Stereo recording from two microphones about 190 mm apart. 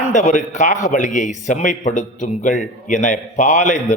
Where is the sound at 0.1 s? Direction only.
40° left (ahead or behind).